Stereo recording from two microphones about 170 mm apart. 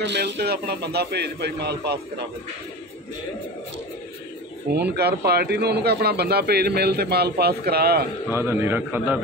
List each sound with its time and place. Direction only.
0.0 s speech: 90° right
4.9 s speech: 70° right (ahead or behind)
8.3 s a man's voice: 15° right (ahead or behind)